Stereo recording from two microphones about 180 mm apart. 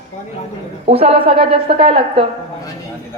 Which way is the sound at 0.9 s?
35° right (ahead or behind).